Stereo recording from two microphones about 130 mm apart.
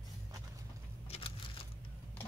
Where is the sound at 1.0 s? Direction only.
45° left (ahead or behind).